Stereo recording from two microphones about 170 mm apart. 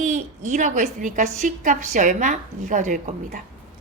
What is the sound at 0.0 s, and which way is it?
A woman's voice, 45° right (ahead or behind).